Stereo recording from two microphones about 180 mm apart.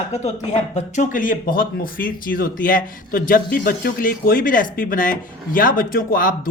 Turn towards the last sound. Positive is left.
turn(degrees=50)  # may be behind; listen again after turning